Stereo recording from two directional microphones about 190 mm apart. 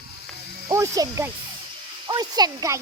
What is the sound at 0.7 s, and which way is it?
Speech, 15° right (ahead or behind).